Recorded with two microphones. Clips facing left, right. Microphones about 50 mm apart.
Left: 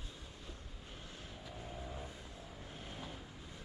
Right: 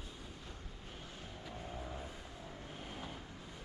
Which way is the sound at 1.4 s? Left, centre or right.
Centre.